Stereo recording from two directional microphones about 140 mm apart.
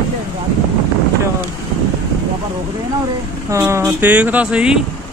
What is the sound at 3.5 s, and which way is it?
Speech, 20° right (ahead or behind).